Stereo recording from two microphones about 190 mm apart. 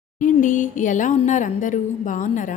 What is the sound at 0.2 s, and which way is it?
A woman's voice, 45° left (ahead or behind).